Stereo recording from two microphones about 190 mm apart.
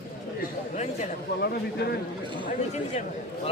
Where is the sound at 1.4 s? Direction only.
55° left (ahead or behind).